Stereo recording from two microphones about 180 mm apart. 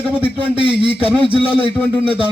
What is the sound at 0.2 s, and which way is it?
A man's voice, 30° right (ahead or behind).